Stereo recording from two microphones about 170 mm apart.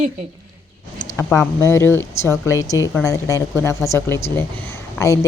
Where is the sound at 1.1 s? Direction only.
15° left (ahead or behind).